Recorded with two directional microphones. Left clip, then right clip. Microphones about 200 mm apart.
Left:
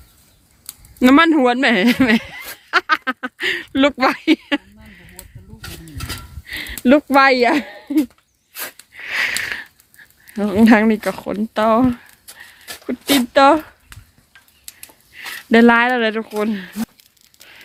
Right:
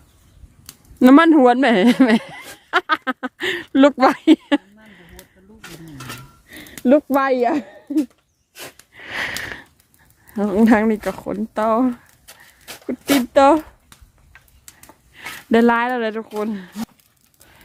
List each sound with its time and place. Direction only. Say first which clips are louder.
0.9 s speech: right 1 dB; 20° right (ahead or behind)
6.5 s speech: left 1 dB; 10° left (ahead or behind)
8.9 s sniff: left 5 dB; 20° right (ahead or behind)
10.3 s speech: left 2 dB; 10° right (ahead or behind)
15.1 s a sound: left 3 dB; 20° right (ahead or behind)
15.4 s speech: left 4 dB; 5° right (ahead or behind)